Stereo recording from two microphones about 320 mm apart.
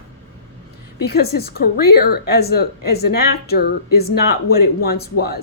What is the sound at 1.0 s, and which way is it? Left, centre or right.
A woman's voice, left.